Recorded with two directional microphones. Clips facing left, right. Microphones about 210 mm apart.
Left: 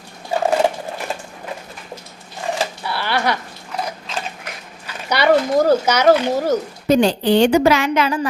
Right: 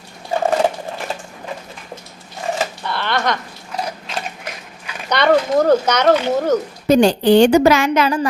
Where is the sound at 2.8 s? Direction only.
10° left (ahead or behind).